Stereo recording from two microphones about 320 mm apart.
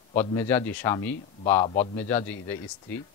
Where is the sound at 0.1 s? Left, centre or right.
Centre.